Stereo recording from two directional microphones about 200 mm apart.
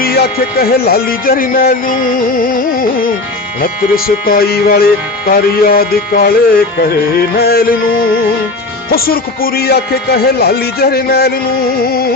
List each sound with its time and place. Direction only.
0.0 s speech: 50° left (ahead or behind)
8.9 s speech: 50° left (ahead or behind)